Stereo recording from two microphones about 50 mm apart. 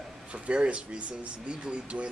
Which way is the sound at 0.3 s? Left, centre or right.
Right.